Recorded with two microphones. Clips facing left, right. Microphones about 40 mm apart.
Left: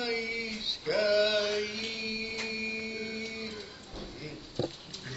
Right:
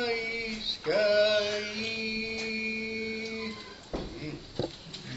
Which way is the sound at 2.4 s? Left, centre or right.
Centre.